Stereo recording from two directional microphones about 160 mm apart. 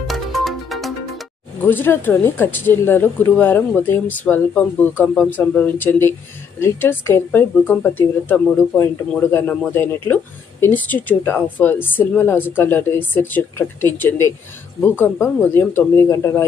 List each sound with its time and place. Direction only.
0.1 s music: centre (ahead or behind)
1.6 s speech: 15° left (ahead or behind)
5.0 s speech: centre (ahead or behind)
5.3 s speech: 10° left (ahead or behind)